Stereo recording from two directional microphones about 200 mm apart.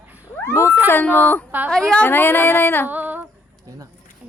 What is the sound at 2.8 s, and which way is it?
Female singing, 10° right (ahead or behind).